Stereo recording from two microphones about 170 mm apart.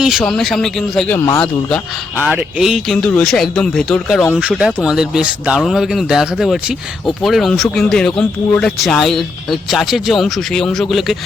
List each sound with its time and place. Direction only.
0.2 s speech: 5° left (ahead or behind)
1.2 s speech: 15° left (ahead or behind)
2.2 s speech: 5° right (ahead or behind)
4.4 s speech: 5° right (ahead or behind)